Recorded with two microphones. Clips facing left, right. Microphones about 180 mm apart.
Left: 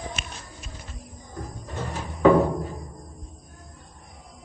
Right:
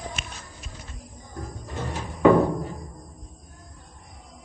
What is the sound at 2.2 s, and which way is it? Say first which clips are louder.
Music: even; centre (ahead or behind).